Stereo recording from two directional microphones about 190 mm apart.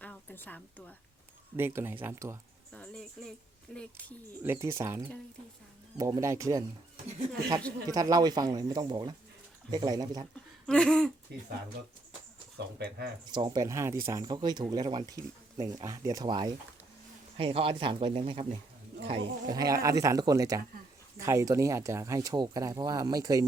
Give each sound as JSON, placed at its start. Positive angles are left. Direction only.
{"t": 0.0, "sound": "a sound", "side_deg": 10}
{"t": 1.5, "sound": "speech", "side_deg": -10}
{"t": 2.7, "sound": "speech", "side_deg": 5}
{"t": 4.4, "sound": "speech", "side_deg": -15}
{"t": 7.9, "sound": "speech", "side_deg": -20}
{"t": 10.3, "sound": "a sound", "side_deg": 5}
{"t": 11.3, "sound": "speech", "side_deg": -60}
{"t": 12.5, "sound": "speech", "side_deg": -60}
{"t": 13.3, "sound": "speech", "side_deg": -25}
{"t": 18.9, "sound": "roaring cats", "side_deg": -55}
{"t": 19.5, "sound": "speech", "side_deg": -20}